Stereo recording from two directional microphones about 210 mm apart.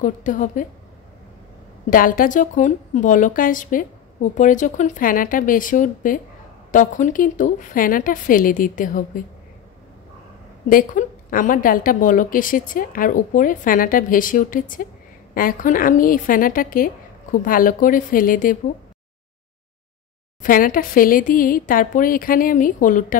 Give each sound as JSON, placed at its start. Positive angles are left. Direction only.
{"t": 0.0, "sound": "a woman's voice", "side_deg": 40}
{"t": 1.9, "sound": "a woman's voice", "side_deg": 40}
{"t": 10.7, "sound": "a woman's voice", "side_deg": 40}
{"t": 20.4, "sound": "a woman's voice", "side_deg": 40}